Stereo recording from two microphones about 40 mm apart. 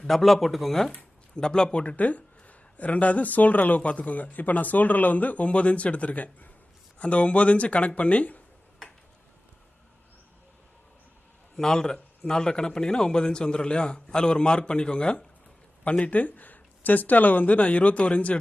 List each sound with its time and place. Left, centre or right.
0.1 s speech: centre
1.3 s a man's voice: left
2.0 s speech: left
11.5 s a man's voice: centre
15.8 s speech: left